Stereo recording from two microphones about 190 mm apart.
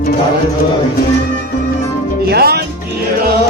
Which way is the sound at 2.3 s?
55° right (ahead or behind).